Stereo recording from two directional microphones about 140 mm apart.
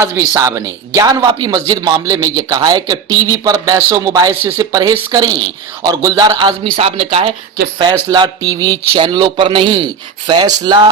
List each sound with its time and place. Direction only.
0.0 s a man's voice: 15° right (ahead or behind); by 7.3 s 40° right (ahead or behind)
8.1 s a man's voice: 30° right (ahead or behind)